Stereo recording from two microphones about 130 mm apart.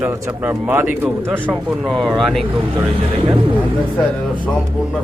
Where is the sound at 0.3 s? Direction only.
5° right (ahead or behind).